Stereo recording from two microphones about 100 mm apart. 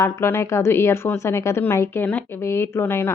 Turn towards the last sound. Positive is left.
turn(degrees=20)  # may be behind; listen again after turning